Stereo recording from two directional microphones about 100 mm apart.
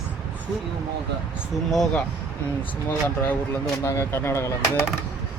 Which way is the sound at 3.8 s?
30° left (ahead or behind).